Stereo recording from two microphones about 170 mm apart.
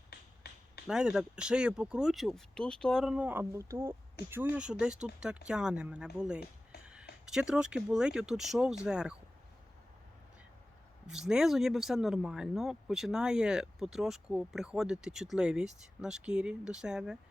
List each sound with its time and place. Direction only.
0.1 s finger snapping: 70° left (ahead or behind)
0.9 s speech: 5° right (ahead or behind)
11.0 s speech: 5° right (ahead or behind)